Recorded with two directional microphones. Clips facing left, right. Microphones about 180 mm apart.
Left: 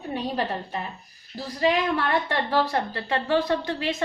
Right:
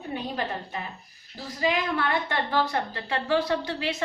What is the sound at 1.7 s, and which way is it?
A woman's voice, 40° left (ahead or behind).